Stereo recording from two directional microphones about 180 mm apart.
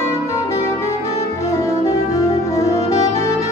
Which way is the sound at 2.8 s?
35° left (ahead or behind).